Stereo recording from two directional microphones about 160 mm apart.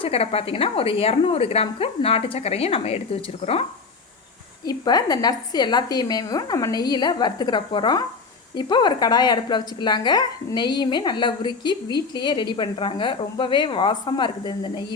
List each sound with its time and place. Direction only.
0.0 s a woman's voice: 40° left (ahead or behind)
4.6 s a woman's voice: 25° left (ahead or behind)